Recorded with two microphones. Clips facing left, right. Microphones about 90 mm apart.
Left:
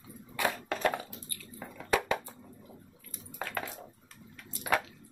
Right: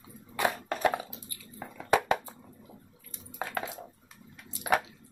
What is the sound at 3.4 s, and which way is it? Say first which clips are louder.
Dishes: right 2 dB; 20° right (ahead or behind).